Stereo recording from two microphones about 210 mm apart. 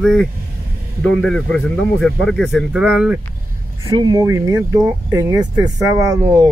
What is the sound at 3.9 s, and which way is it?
Speech, 20° right (ahead or behind).